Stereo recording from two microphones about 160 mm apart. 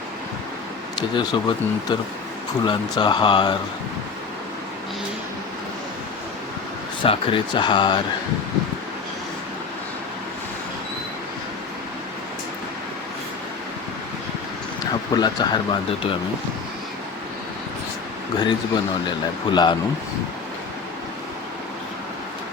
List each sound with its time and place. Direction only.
0.9 s speech: 25° left (ahead or behind)
7.0 s speech: 35° left (ahead or behind)
15.1 s speech: 25° left (ahead or behind)
18.3 s speech: 25° left (ahead or behind)